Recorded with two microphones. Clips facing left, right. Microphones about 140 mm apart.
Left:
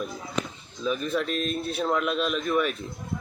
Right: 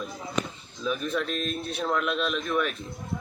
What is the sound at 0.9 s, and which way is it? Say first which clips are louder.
Speech: left 2 dB; centre (ahead or behind).